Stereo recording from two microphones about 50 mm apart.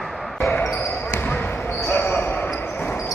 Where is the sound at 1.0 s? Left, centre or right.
Left.